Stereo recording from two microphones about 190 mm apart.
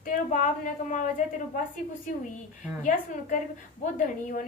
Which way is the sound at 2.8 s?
40° left (ahead or behind).